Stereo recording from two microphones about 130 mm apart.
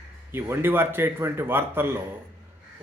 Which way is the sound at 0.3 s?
20° right (ahead or behind).